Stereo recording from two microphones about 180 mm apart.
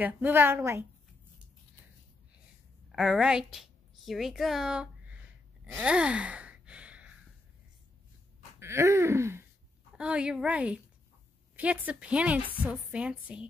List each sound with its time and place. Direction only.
0.0 s a woman's voice: 10° right (ahead or behind)
2.9 s a woman's voice: centre (ahead or behind)
5.7 s gasp: 5° right (ahead or behind)
8.5 s a sound: 15° right (ahead or behind)
9.9 s a woman's voice: 5° right (ahead or behind)